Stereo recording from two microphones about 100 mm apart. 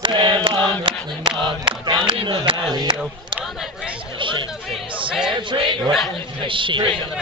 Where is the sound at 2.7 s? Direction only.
40° right (ahead or behind).